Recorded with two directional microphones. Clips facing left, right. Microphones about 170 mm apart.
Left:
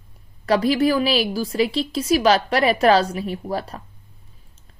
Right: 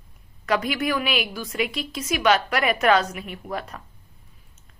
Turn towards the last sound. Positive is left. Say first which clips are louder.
# left 5 dB
turn(degrees=30)  # may be behind; listen again after turning